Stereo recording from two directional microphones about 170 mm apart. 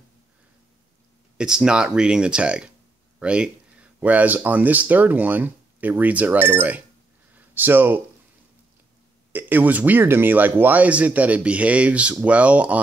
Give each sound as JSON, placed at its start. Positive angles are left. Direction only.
{"t": 1.4, "sound": "speech", "side_deg": -5}
{"t": 9.3, "sound": "speech", "side_deg": -10}